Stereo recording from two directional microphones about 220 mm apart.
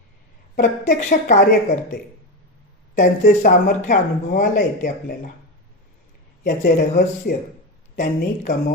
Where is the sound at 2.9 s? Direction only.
40° left (ahead or behind).